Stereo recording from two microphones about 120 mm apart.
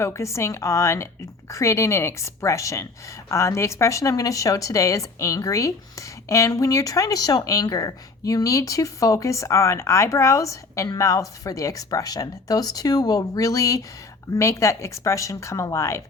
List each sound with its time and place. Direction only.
0.0 s speech: 25° left (ahead or behind)